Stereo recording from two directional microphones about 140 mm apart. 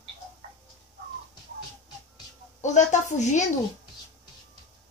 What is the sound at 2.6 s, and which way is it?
Speech, 60° left (ahead or behind).